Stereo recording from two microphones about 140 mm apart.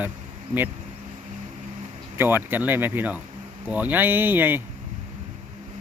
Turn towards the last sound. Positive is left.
turn(degrees=-15)  # may be behind; listen again after turning